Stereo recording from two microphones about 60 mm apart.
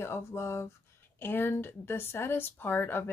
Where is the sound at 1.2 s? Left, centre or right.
Left.